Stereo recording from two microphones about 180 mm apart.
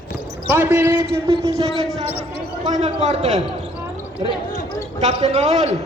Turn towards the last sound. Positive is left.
turn(degrees=-40)  # may be behind; listen again after turning